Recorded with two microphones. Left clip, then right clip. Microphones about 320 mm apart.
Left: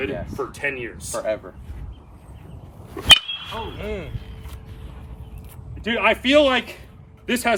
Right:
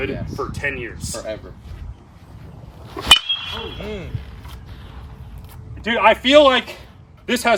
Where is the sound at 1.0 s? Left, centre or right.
Centre.